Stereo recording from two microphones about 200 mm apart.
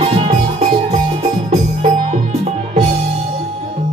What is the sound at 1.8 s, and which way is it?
Music, 35° right (ahead or behind).